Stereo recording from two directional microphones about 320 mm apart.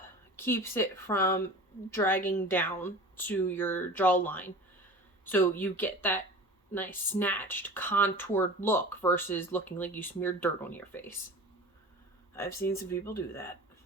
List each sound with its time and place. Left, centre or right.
0.3 s speech: centre
12.3 s speech: centre